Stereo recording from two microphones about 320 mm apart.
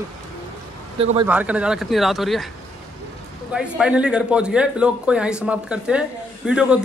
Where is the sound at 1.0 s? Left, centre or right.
Centre.